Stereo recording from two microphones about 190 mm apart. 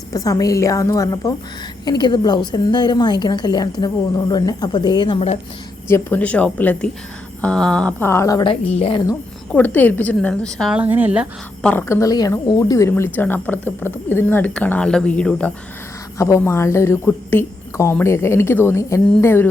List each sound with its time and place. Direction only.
0.1 s a woman's voice: 20° left (ahead or behind)
5.9 s a woman's voice: 10° left (ahead or behind)
8.7 s a woman's voice: 30° left (ahead or behind)
9.5 s a woman's voice: 10° left (ahead or behind); by 11.3 s 10° right (ahead or behind)
11.6 s a woman's voice: 10° left (ahead or behind)